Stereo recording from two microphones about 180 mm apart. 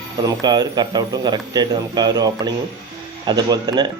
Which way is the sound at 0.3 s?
20° right (ahead or behind).